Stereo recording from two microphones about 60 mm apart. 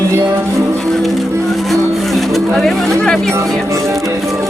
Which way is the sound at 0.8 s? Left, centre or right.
Centre.